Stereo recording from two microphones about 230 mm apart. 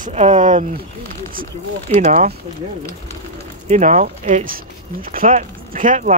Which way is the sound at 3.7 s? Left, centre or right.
Right.